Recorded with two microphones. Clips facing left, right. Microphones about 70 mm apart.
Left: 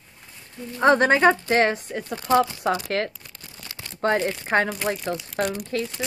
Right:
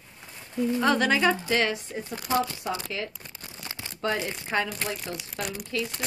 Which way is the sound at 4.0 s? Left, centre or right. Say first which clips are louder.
Left 7 dB; left.